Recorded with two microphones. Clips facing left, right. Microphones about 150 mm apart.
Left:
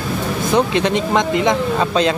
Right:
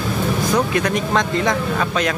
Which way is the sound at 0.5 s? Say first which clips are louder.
Left 5 dB; 25° left (ahead or behind).